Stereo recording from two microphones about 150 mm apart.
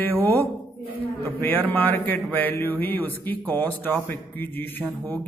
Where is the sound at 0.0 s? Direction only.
10° left (ahead or behind).